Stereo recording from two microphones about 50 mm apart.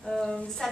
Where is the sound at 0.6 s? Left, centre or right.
Centre.